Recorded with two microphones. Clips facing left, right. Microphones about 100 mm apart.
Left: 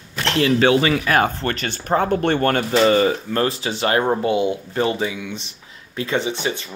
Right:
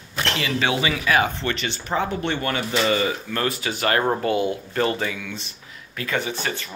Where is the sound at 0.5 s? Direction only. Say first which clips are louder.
Left 7 dB; 40° left (ahead or behind).